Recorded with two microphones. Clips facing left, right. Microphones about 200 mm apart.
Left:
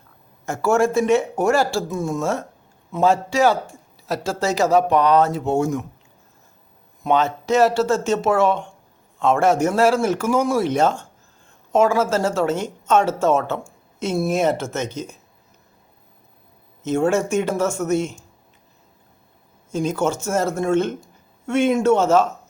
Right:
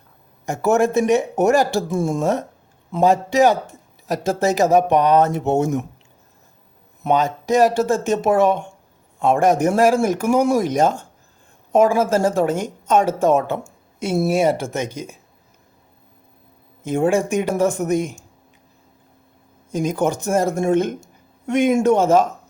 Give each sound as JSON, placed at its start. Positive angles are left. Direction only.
{"t": 0.4, "sound": "speech", "side_deg": -20}
{"t": 7.2, "sound": "speech", "side_deg": -15}
{"t": 16.8, "sound": "speech", "side_deg": -10}
{"t": 19.7, "sound": "speech", "side_deg": -15}